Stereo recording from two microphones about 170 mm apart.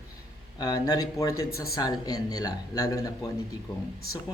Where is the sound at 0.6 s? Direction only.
20° left (ahead or behind).